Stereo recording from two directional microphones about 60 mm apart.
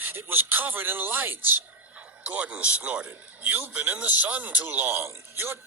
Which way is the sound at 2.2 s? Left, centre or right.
Right.